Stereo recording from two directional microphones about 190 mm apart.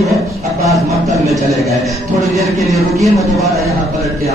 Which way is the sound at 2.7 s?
Centre (ahead or behind).